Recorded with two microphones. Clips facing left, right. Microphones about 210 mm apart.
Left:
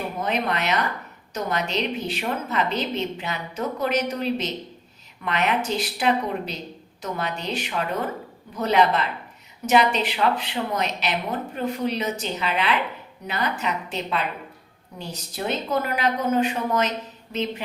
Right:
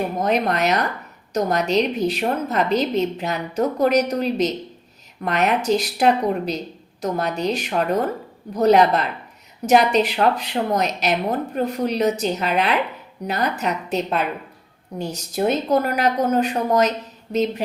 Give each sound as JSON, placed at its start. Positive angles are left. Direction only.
{"t": 0.2, "sound": "a woman's voice", "side_deg": -40}